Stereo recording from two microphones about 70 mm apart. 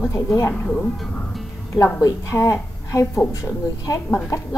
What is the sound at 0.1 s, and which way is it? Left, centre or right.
Speech, left.